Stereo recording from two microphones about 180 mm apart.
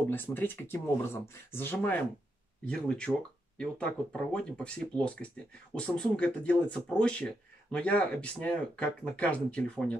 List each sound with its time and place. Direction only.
0.1 s speech: 10° left (ahead or behind)